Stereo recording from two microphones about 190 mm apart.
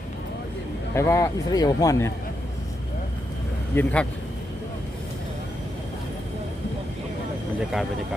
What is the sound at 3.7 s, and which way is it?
Speech, 10° left (ahead or behind).